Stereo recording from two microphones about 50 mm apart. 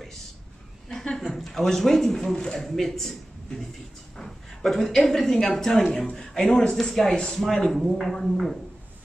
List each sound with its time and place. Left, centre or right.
1.1 s a man's voice: centre